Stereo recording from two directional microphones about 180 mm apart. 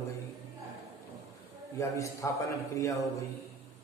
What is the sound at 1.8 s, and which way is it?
A man's voice, 15° left (ahead or behind).